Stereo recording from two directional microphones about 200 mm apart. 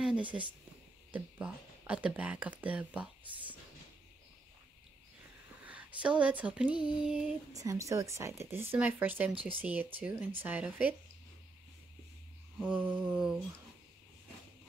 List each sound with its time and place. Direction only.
0.0 s a woman's voice: 5° right (ahead or behind)
5.7 s speech: 5° right (ahead or behind)
7.5 s speech: 15° right (ahead or behind)
9.3 s speech: 25° right (ahead or behind)
9.6 s speech: 10° right (ahead or behind)
12.5 s speech: 10° right (ahead or behind)